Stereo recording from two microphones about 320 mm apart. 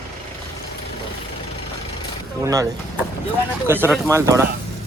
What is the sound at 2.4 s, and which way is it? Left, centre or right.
Speech, centre.